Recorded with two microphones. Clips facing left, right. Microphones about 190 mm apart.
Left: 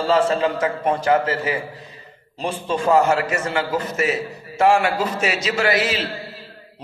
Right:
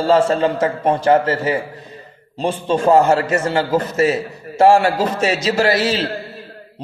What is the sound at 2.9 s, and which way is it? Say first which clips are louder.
A man's voice: right 4 dB; 35° right (ahead or behind).